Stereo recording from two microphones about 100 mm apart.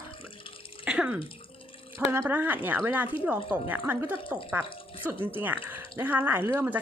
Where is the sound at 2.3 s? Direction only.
20° right (ahead or behind).